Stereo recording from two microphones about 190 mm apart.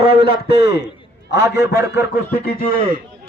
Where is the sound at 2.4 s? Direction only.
50° left (ahead or behind).